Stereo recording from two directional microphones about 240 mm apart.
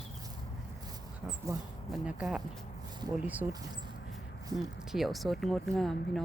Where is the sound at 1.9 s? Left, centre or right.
Centre.